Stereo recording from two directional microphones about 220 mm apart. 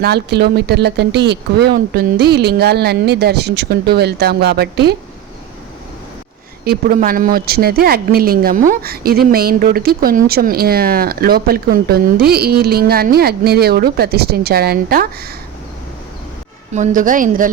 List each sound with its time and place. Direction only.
0.0 s speech: 50° right (ahead or behind)
6.7 s speech: 40° right (ahead or behind)
16.7 s speech: 35° right (ahead or behind)